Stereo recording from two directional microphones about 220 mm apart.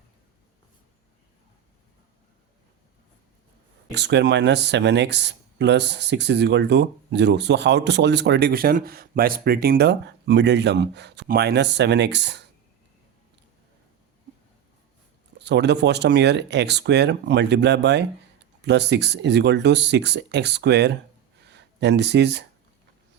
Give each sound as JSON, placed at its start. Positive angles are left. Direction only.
{"t": 3.9, "sound": "speech", "side_deg": -50}
{"t": 15.4, "sound": "speech", "side_deg": -50}